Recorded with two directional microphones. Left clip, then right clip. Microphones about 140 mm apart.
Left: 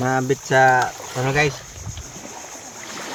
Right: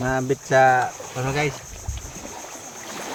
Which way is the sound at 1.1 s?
45° left (ahead or behind).